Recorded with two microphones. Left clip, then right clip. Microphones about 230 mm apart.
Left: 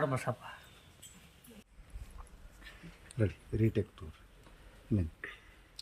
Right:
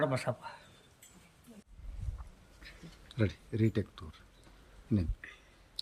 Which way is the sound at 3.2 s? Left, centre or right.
Centre.